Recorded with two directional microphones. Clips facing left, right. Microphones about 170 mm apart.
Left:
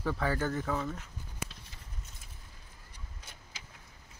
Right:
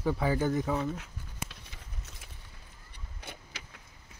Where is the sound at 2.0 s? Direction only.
75° right (ahead or behind).